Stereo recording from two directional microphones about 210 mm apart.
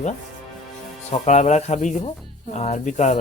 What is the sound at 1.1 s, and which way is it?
Speech, 35° left (ahead or behind).